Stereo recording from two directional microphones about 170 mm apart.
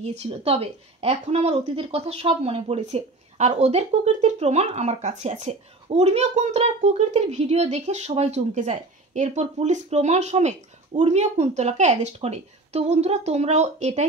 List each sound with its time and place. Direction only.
0.0 s a woman's voice: 40° right (ahead or behind)